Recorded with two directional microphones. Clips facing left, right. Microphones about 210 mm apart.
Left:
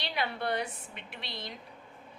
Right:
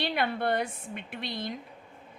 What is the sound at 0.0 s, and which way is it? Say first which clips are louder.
A woman's voice: right 5 dB; 55° right (ahead or behind).